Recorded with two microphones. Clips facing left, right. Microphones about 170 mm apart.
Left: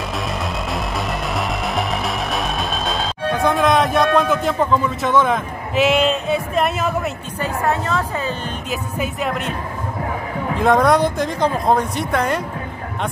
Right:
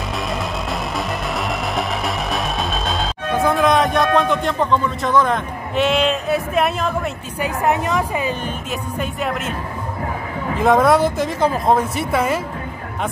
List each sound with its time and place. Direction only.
0.3 s music: centre (ahead or behind)
3.4 s a man's voice: centre (ahead or behind)
7.3 s speech: 15° right (ahead or behind)
8.9 s speech: centre (ahead or behind)
10.5 s speech: centre (ahead or behind)